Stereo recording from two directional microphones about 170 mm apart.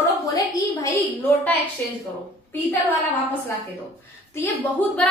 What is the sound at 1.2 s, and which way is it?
Speech, 10° left (ahead or behind).